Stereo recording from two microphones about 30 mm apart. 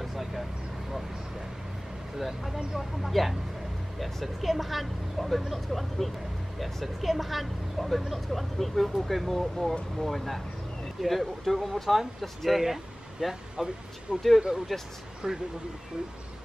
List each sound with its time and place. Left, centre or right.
0.0 s a sound: centre
2.1 s speech: centre
13.2 s speech: right
14.1 s speech: right
14.7 s speech: centre
15.2 s speech: right